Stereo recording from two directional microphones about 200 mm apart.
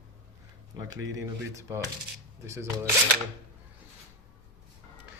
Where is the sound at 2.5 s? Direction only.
15° right (ahead or behind).